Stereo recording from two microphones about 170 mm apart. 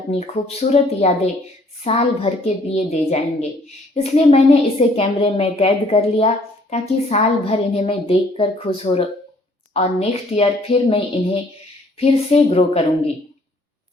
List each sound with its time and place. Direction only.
0.1 s a woman's voice: 35° left (ahead or behind)